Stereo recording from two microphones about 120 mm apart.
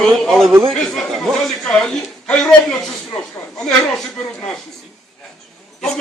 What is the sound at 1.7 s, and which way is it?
Speech, 5° left (ahead or behind).